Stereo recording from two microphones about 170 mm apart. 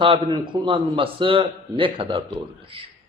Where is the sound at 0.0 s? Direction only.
30° right (ahead or behind).